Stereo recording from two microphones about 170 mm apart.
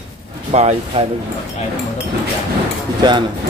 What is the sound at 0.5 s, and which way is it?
Speech, 40° right (ahead or behind).